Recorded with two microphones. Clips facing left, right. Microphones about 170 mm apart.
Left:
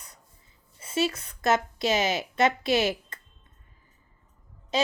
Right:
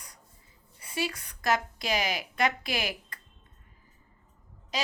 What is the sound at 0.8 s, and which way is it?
A woman's voice, 25° left (ahead or behind).